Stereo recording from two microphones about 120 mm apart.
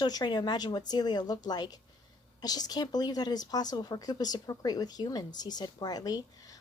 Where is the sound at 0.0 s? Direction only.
35° left (ahead or behind).